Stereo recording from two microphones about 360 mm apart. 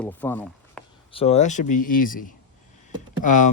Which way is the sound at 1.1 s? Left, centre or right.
Centre.